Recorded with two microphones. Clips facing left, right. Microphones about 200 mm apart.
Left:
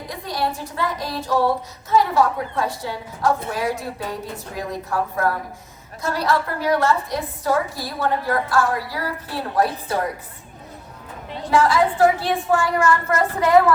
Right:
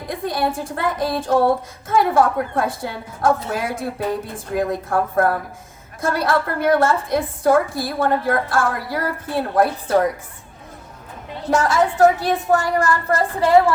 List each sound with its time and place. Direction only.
0.1 s a woman's voice: 50° right (ahead or behind)
11.5 s a woman's voice: 45° right (ahead or behind)